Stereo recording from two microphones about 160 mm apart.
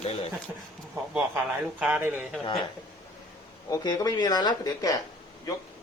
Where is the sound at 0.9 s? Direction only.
10° right (ahead or behind).